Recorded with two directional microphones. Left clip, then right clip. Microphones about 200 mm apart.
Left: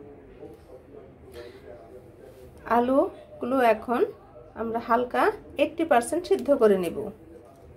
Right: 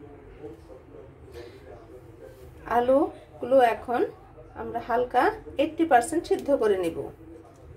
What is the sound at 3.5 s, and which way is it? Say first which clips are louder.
A woman's voice: right 2 dB; 25° left (ahead or behind).